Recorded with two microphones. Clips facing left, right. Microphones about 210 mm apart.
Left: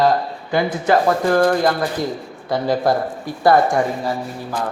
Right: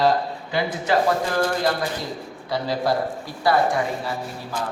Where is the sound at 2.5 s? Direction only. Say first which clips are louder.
Left 5 dB; 50° left (ahead or behind).